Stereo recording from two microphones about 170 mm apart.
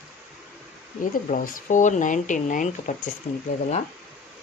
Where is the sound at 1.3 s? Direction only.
50° left (ahead or behind).